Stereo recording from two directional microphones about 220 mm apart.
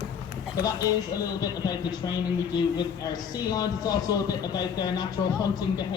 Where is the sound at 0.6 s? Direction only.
15° left (ahead or behind).